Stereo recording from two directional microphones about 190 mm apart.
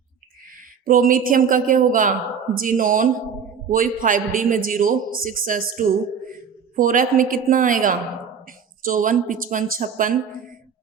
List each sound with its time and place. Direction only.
0.9 s a man's voice: 45° right (ahead or behind)